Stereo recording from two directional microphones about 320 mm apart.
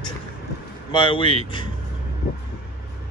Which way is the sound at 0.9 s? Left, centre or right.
Centre.